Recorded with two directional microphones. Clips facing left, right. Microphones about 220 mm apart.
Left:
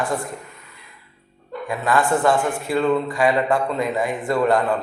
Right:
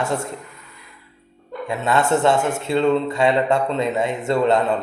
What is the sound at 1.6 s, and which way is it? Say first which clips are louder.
Speech: right 1 dB; 25° right (ahead or behind).